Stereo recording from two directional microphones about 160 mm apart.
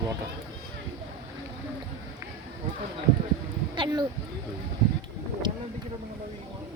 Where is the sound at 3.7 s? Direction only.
30° right (ahead or behind).